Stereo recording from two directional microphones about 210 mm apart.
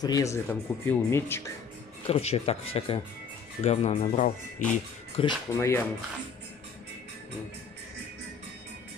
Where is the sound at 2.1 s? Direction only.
30° left (ahead or behind).